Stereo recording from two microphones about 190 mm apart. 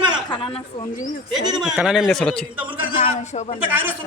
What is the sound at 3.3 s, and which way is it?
Speech, 35° left (ahead or behind).